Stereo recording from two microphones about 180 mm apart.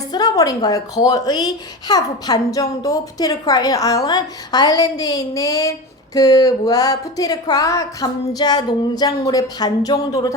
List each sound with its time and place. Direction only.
0.1 s speech: 20° left (ahead or behind)